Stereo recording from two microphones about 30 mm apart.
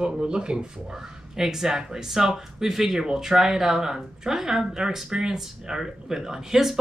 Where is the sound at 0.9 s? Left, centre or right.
Centre.